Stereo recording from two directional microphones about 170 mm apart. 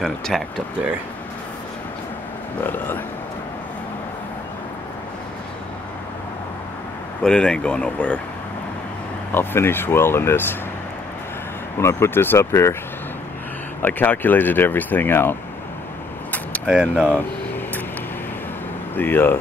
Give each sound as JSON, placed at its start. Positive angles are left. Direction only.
{"t": 0.3, "sound": "speech", "side_deg": 0}
{"t": 2.6, "sound": "speech", "side_deg": 10}
{"t": 7.2, "sound": "speech", "side_deg": 5}
{"t": 9.3, "sound": "speech", "side_deg": 10}
{"t": 11.8, "sound": "speech", "side_deg": 15}
{"t": 13.8, "sound": "speech", "side_deg": 10}
{"t": 16.9, "sound": "speech", "side_deg": -5}
{"t": 18.9, "sound": "speech", "side_deg": 10}